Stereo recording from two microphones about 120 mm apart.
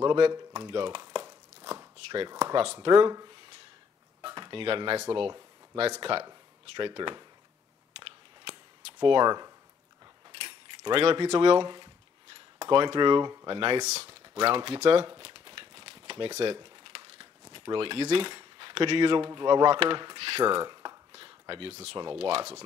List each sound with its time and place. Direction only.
0.0 s speech: 40° right (ahead or behind)
0.7 s crumpling: 45° right (ahead or behind)
2.5 s speech: 50° right (ahead or behind)
4.2 s dishes: 40° right (ahead or behind)
5.8 s speech: 50° right (ahead or behind)
8.0 s a sound: 50° right (ahead or behind); by 9.5 s 35° right (ahead or behind)
11.0 s speech: 50° right (ahead or behind)
13.8 s speech: 65° right (ahead or behind)
14.6 s crumpling: 50° right (ahead or behind)
16.5 s speech: 45° right (ahead or behind)
20.2 s cutlery: 55° right (ahead or behind)
21.1 s a sound: 50° right (ahead or behind)
21.9 s speech: 45° right (ahead or behind)